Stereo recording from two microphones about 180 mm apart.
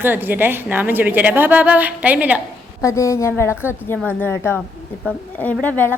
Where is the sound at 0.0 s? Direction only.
10° right (ahead or behind).